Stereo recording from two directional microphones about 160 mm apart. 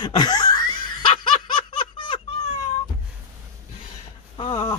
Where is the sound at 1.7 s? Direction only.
30° left (ahead or behind).